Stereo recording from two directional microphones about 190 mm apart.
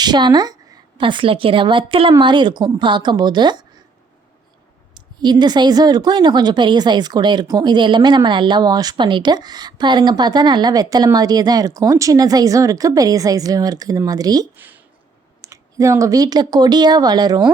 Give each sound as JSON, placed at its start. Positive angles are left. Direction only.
{"t": 0.0, "sound": "a woman's voice", "side_deg": -20}
{"t": 4.9, "sound": "speech", "side_deg": -25}
{"t": 14.5, "sound": "speech", "side_deg": -10}